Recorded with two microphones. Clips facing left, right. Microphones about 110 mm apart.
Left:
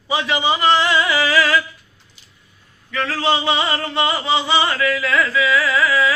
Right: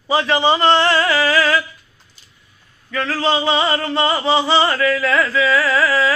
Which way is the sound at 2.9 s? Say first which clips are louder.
Right 1 dB; 30° right (ahead or behind).